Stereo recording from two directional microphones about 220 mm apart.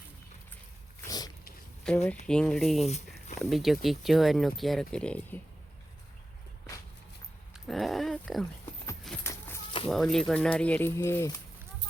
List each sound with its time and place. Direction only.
1.0 s dog: 15° left (ahead or behind)
1.9 s speech: 5° left (ahead or behind)
7.5 s speech: centre (ahead or behind)
9.2 s a sound: 10° left (ahead or behind)
9.9 s speech: centre (ahead or behind)